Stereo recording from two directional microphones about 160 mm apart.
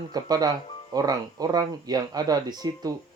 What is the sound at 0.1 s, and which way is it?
Speech, 25° right (ahead or behind).